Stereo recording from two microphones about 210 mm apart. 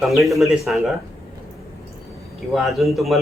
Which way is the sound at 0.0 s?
Centre (ahead or behind).